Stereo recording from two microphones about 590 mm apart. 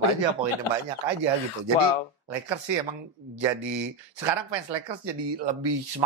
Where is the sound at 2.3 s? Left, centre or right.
Right.